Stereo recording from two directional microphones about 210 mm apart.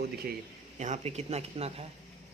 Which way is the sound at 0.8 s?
30° right (ahead or behind).